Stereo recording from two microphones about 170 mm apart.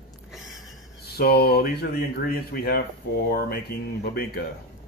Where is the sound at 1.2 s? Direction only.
70° left (ahead or behind).